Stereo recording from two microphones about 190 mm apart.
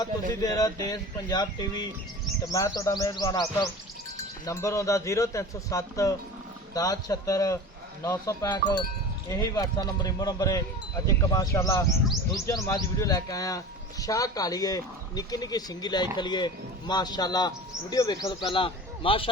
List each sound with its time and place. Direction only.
0.3 s a man's voice: 20° left (ahead or behind)